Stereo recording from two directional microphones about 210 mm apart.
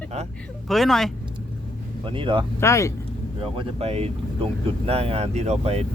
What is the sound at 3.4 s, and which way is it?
Speech, 25° right (ahead or behind).